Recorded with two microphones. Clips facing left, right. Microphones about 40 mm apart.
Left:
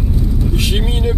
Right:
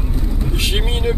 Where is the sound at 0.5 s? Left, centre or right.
Centre.